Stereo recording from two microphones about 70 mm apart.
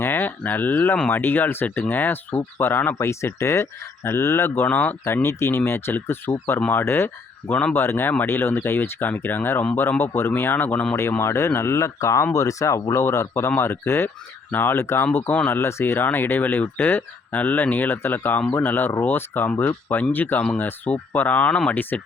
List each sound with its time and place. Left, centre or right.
0.0 s speech: left
3.0 s speech: left
4.6 s speech: left
5.0 s speech: left
11.2 s speech: left; by 21.8 s centre
21.8 s speech: left